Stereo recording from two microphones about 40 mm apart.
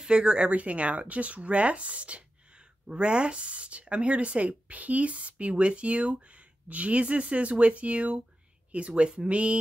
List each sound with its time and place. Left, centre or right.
0.0 s speech: right
0.5 s speech: right